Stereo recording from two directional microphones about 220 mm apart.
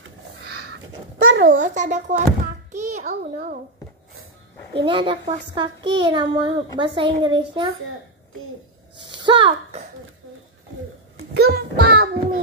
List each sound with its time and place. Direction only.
0.6 s a sound: 60° right (ahead or behind)
1.5 s a child's voice: 35° right (ahead or behind)
2.7 s a sound: 35° right (ahead or behind)
3.2 s a child's voice: 40° right (ahead or behind)
4.8 s a child's voice: 20° right (ahead or behind)
9.1 s speech: 20° right (ahead or behind)
11.3 s child singing: 45° right (ahead or behind)